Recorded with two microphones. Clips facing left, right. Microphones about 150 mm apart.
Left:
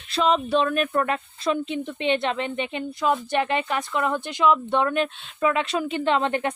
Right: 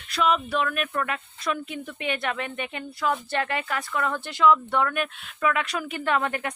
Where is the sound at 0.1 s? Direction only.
30° left (ahead or behind).